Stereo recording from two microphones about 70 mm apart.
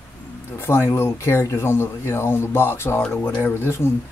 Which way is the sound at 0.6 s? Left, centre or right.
Left.